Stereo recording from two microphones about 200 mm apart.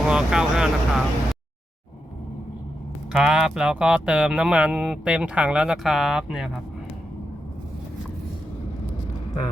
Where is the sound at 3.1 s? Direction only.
5° right (ahead or behind).